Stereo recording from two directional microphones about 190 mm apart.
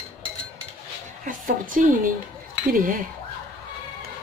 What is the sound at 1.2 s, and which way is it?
Speech, 45° right (ahead or behind).